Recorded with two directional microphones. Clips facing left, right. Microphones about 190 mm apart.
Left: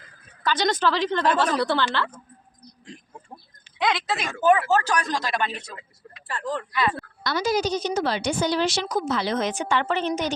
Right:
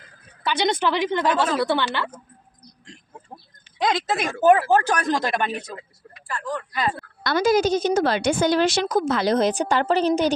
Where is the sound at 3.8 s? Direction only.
45° right (ahead or behind).